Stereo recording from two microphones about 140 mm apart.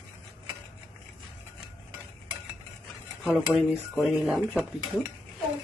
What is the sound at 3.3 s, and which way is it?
Dishes, 5° right (ahead or behind).